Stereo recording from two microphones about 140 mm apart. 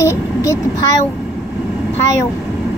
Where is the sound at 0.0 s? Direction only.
20° left (ahead or behind).